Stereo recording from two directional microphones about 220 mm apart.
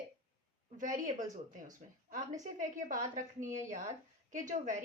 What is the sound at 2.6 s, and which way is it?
A woman's voice, 35° right (ahead or behind).